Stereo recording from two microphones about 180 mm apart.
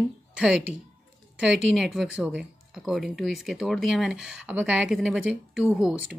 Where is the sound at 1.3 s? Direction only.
5° right (ahead or behind).